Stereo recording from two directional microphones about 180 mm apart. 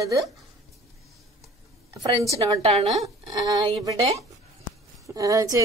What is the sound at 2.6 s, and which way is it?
Speech, 35° right (ahead or behind).